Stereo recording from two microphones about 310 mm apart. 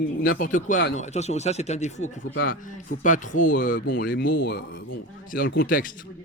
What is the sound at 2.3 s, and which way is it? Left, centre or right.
A man's voice, left.